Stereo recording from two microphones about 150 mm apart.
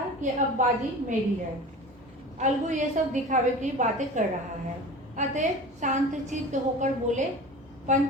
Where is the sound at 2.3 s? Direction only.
55° right (ahead or behind).